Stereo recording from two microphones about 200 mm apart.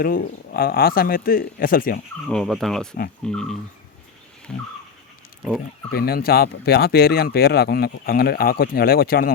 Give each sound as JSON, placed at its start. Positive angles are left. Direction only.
{"t": 0.0, "sound": "speech", "side_deg": 45}
{"t": 2.2, "sound": "speech", "side_deg": 0}
{"t": 5.9, "sound": "speech", "side_deg": 50}